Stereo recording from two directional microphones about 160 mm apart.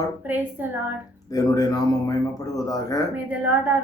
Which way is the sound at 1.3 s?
25° left (ahead or behind).